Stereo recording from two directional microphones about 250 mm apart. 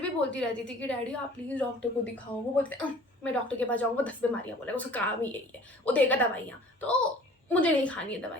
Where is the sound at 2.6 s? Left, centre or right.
Centre.